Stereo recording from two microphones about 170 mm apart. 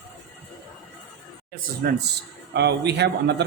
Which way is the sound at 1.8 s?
65° right (ahead or behind).